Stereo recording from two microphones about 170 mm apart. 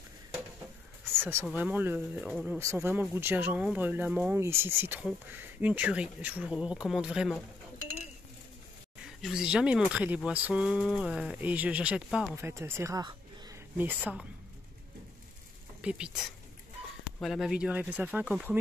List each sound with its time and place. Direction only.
1.2 s speech: 10° right (ahead or behind)
2.6 s speech: 15° right (ahead or behind)
9.0 s speech: 5° right (ahead or behind)
12.4 s speech: 15° right (ahead or behind)
15.8 s speech: 5° right (ahead or behind)
17.2 s speech: centre (ahead or behind)